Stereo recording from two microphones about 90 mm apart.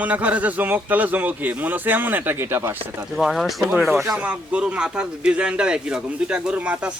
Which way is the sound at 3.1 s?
Centre (ahead or behind).